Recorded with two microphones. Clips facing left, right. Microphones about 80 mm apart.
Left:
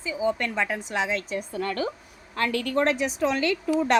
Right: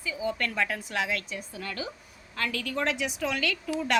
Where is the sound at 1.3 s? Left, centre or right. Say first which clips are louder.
Left 8 dB; left.